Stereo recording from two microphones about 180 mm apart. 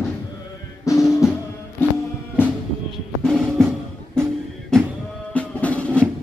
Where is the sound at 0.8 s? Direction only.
20° left (ahead or behind).